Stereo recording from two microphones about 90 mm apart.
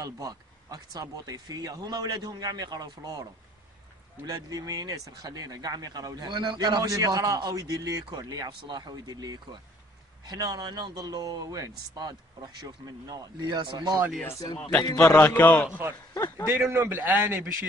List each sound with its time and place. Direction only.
0.0 s speech: 45° right (ahead or behind)
4.3 s speech: 45° right (ahead or behind)
14.8 s a man's voice: 35° left (ahead or behind)
15.0 s a man's voice: 20° left (ahead or behind)
16.4 s a man's voice: 20° right (ahead or behind)